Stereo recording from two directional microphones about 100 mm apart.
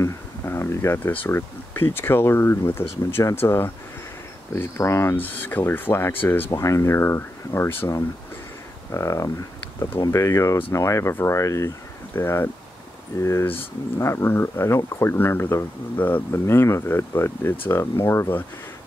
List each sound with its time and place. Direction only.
0.0 s speech: 25° left (ahead or behind)
8.9 s speech: 30° left (ahead or behind)